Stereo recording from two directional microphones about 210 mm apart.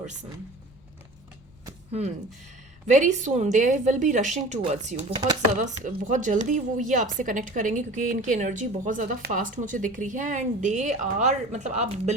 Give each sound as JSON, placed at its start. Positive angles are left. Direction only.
{"t": 2.8, "sound": "a woman's voice", "side_deg": -35}